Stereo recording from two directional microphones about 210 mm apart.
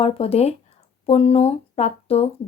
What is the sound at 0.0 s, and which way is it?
Speech, 30° left (ahead or behind).